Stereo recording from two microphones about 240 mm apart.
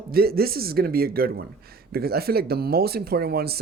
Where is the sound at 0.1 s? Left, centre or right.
Right.